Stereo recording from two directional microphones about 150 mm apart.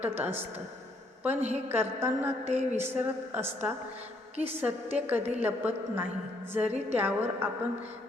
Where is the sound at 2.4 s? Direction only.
45° right (ahead or behind).